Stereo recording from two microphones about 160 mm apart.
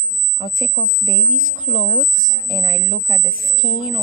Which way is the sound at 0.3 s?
50° right (ahead or behind).